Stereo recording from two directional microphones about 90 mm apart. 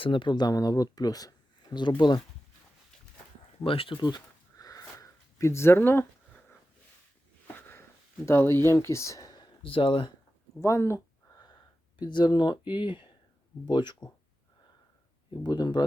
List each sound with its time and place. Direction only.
0.0 s speech: 70° left (ahead or behind); by 1.3 s 45° left (ahead or behind)
1.7 s speech: 60° left (ahead or behind)
3.6 s speech: 85° left; by 4.2 s 60° left (ahead or behind)
4.5 s a sound: 40° left (ahead or behind); by 6.4 s 25° left (ahead or behind)
7.4 s a sound: 25° left (ahead or behind)
9.3 s a sound: 70° left (ahead or behind)
10.6 s speech: 35° left (ahead or behind)
11.9 s speech: 60° left (ahead or behind)
15.3 s speech: 50° left (ahead or behind)